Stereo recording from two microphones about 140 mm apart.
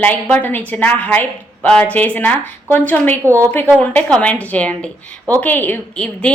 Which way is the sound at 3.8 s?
10° left (ahead or behind).